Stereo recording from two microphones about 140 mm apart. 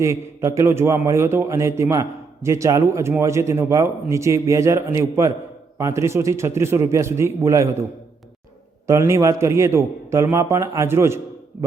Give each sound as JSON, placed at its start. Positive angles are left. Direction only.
{"t": 0.0, "sound": "a man's voice", "side_deg": -20}
{"t": 8.9, "sound": "a man's voice", "side_deg": -20}